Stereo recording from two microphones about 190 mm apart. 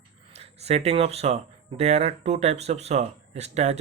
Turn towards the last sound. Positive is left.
turn(degrees=-35)  # may be behind; listen again after turning